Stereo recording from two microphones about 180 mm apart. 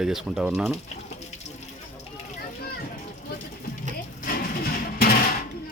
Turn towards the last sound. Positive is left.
turn(degrees=55)  # may be behind; listen again after turning